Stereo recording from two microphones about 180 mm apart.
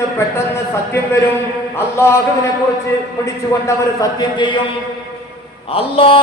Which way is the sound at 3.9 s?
25° left (ahead or behind).